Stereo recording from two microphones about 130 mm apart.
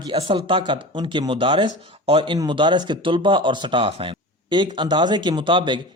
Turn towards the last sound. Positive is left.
turn(degrees=-40)  # may be behind; listen again after turning